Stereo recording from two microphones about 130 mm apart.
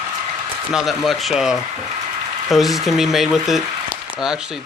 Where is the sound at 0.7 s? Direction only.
Centre (ahead or behind).